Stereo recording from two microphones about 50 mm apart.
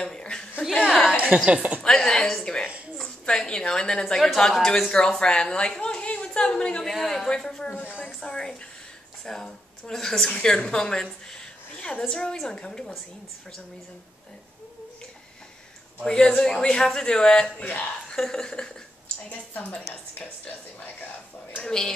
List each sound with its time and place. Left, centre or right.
0.0 s chuckle: centre
1.0 s a woman's voice: right
1.8 s a woman's voice: centre
4.1 s a woman's voice: centre
6.9 s speech: centre
7.2 s a woman's voice: centre
7.7 s speech: left
8.0 s a woman's voice: centre
16.0 s a woman's voice: centre
19.2 s speech: left
21.6 s a woman's voice: centre